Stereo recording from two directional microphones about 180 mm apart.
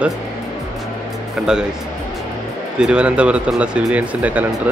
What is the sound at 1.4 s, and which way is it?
Speech, 5° right (ahead or behind).